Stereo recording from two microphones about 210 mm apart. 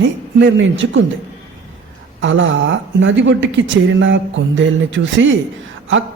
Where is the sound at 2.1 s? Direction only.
65° right (ahead or behind).